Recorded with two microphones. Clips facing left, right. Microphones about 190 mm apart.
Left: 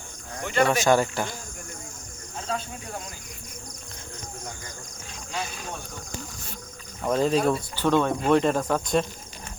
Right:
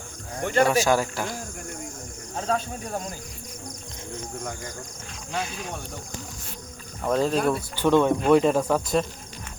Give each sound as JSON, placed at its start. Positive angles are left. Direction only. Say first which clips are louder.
{"t": 0.4, "sound": "speech", "louder": "right 2 dB", "side_deg": -40}
{"t": 0.7, "sound": "speech", "louder": "left 1 dB", "side_deg": -5}
{"t": 2.3, "sound": "speech", "louder": "right 5 dB", "side_deg": -40}
{"t": 7.0, "sound": "speech", "louder": "even", "side_deg": 0}
{"t": 7.8, "sound": "speech", "louder": "right 5 dB", "side_deg": -15}